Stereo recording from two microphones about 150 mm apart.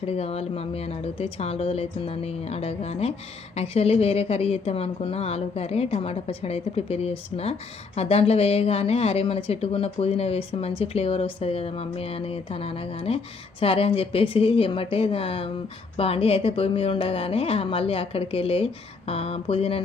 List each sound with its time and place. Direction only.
0.0 s a woman's voice: 40° left (ahead or behind)